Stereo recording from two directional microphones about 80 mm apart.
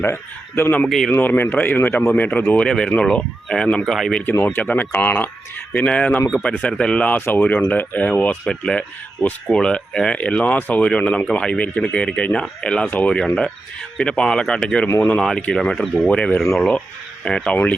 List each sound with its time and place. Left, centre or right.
0.0 s a man's voice: left
0.9 s speech: centre
1.1 s speech: left; by 4.2 s centre
4.5 s speech: left
12.8 s speech: left
13.1 s speech: centre